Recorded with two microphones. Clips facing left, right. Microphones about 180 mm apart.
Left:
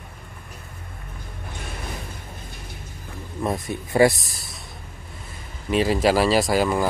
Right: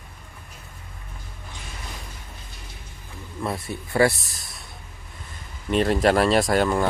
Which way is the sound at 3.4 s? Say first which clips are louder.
Left 3 dB; 15° left (ahead or behind).